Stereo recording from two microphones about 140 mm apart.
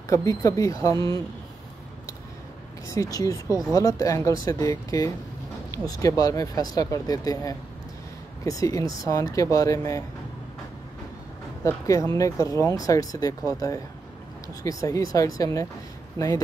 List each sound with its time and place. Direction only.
0.1 s speech: 20° left (ahead or behind)
2.9 s speech: 25° left (ahead or behind)
11.6 s speech: 25° left (ahead or behind)